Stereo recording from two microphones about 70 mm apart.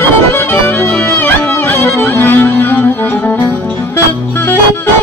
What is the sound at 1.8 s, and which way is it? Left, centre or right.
Music, left.